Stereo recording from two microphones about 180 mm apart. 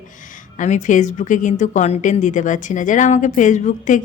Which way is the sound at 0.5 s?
45° left (ahead or behind).